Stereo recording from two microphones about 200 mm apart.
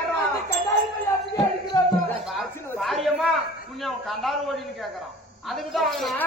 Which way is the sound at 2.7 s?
Centre (ahead or behind).